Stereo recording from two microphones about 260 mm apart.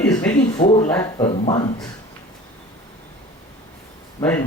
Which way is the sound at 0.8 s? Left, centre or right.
Centre.